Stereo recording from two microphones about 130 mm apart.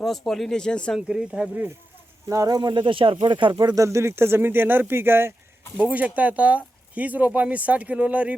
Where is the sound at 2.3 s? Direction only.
25° right (ahead or behind).